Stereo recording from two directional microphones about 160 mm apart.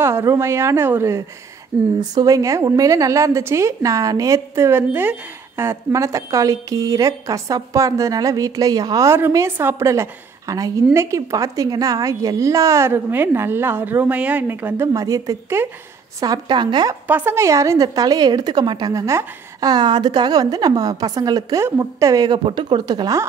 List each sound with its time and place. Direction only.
0.0 s a woman's voice: 15° right (ahead or behind)
17.1 s a woman's voice: 15° right (ahead or behind)